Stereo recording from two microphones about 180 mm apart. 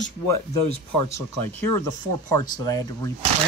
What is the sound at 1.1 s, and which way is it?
Speech, 15° left (ahead or behind).